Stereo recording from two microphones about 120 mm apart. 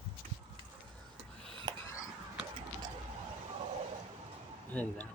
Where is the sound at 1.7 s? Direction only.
35° right (ahead or behind).